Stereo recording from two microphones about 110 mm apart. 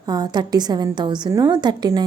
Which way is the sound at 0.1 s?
40° right (ahead or behind).